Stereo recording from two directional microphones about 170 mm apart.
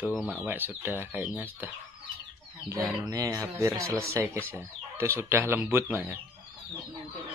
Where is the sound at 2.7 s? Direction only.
15° right (ahead or behind).